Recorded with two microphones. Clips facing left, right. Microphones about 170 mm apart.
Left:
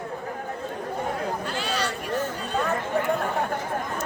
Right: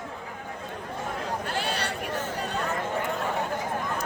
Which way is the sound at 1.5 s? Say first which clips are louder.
Left 2 dB; 55° right (ahead or behind).